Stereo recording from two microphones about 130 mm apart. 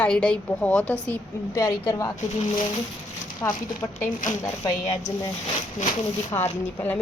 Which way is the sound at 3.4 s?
25° left (ahead or behind).